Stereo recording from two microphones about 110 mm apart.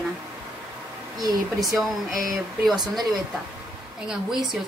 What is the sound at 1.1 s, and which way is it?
Speech, 35° right (ahead or behind).